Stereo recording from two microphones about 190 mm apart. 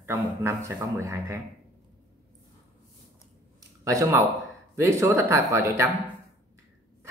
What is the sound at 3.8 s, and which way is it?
A man's voice, 15° right (ahead or behind).